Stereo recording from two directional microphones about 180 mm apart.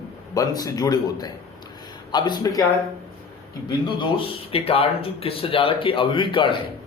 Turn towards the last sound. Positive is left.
turn(degrees=25)  # may be behind; listen again after turning